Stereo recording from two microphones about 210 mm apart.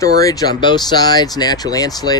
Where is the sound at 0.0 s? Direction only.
15° left (ahead or behind).